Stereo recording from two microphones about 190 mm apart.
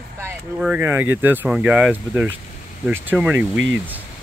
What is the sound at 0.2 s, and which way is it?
Speech, 10° right (ahead or behind).